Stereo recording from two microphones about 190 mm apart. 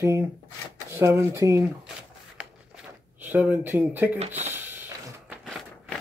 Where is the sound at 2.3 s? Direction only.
10° right (ahead or behind).